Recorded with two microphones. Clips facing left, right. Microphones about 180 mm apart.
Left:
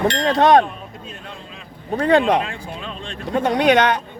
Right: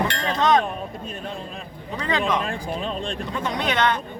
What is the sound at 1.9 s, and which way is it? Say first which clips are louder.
A man's voice: left 8 dB; 60° left (ahead or behind).